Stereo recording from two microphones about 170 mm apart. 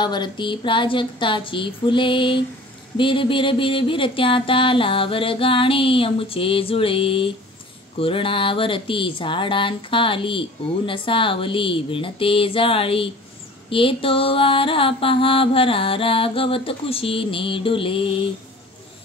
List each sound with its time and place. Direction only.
0.0 s speech: 25° left (ahead or behind)
3.0 s mantra: 30° left (ahead or behind)